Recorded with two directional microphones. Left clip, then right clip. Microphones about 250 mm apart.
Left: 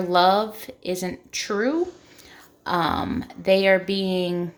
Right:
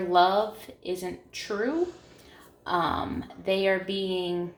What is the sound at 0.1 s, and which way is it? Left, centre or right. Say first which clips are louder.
Speech: left 3 dB; left.